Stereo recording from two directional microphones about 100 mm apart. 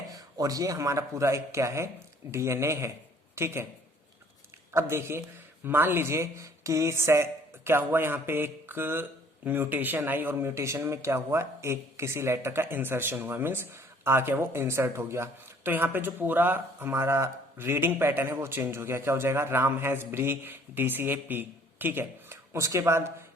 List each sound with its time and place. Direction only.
0.1 s speech: 35° right (ahead or behind)
4.7 s speech: 25° right (ahead or behind)